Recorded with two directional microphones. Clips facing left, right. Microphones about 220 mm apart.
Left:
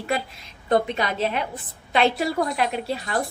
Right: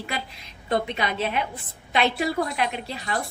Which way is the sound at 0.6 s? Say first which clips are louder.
Left 4 dB; 45° left (ahead or behind).